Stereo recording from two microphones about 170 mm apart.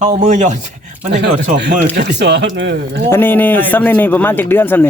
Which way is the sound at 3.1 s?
10° left (ahead or behind).